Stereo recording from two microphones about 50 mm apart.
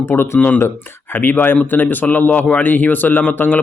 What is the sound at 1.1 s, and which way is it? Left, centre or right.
A man's voice, left.